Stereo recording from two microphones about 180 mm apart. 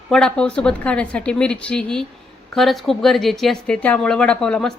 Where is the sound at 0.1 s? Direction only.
5° left (ahead or behind).